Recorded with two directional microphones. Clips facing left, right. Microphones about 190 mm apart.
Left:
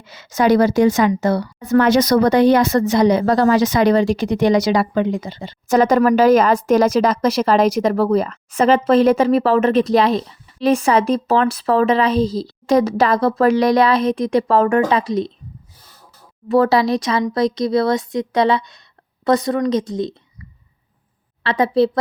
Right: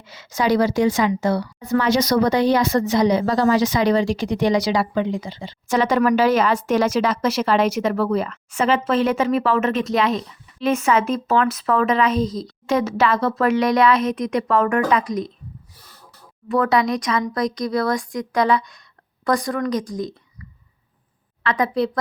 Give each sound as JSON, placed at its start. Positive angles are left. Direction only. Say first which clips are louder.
{"t": 0.1, "sound": "a woman's voice", "louder": "left 5 dB", "side_deg": 50}
{"t": 16.5, "sound": "speech", "louder": "left 4 dB", "side_deg": 30}
{"t": 21.4, "sound": "speech", "louder": "left 5 dB", "side_deg": 30}